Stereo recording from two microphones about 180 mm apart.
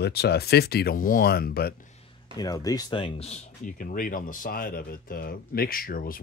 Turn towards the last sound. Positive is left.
turn(degrees=55)  # may be behind; listen again after turning